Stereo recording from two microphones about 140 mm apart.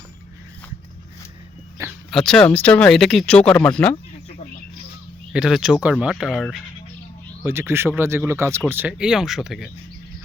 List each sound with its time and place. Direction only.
2.0 s speech: 5° left (ahead or behind)
5.3 s speech: 5° right (ahead or behind)
7.4 s speech: 15° right (ahead or behind)